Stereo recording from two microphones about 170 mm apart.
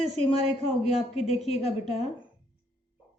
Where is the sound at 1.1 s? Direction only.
35° left (ahead or behind).